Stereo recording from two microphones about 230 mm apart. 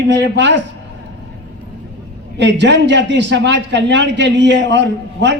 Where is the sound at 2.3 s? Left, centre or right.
Right.